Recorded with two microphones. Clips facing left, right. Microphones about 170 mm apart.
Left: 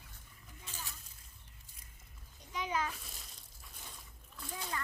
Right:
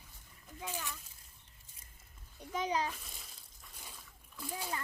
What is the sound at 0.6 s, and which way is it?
Splash, 90° right.